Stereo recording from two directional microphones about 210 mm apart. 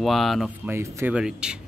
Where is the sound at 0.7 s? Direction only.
10° right (ahead or behind).